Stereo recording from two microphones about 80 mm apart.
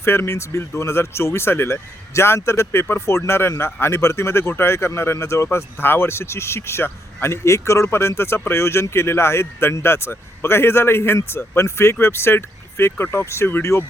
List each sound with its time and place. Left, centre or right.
0.0 s speech: left